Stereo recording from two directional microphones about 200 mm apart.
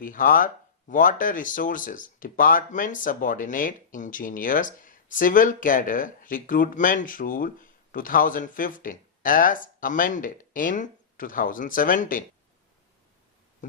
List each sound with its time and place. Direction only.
0.0 s speech: 45° left (ahead or behind)